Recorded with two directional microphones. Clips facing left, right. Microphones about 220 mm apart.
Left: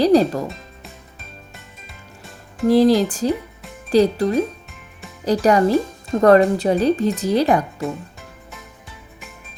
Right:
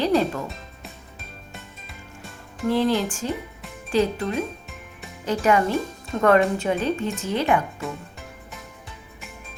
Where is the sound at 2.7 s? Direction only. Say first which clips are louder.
Left 7 dB; 35° left (ahead or behind).